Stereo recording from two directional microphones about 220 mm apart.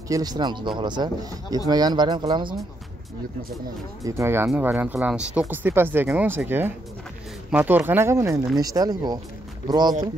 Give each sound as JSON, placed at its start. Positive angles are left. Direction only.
{"t": 0.1, "sound": "speech", "side_deg": -20}
{"t": 4.0, "sound": "speech", "side_deg": -10}